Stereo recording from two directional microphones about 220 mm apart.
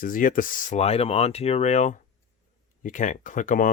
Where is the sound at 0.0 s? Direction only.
40° left (ahead or behind).